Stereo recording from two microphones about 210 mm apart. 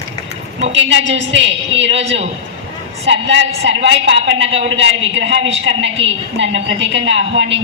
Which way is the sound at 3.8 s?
60° right (ahead or behind).